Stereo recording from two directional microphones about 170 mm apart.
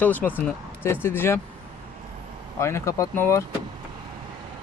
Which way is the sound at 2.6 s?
15° left (ahead or behind).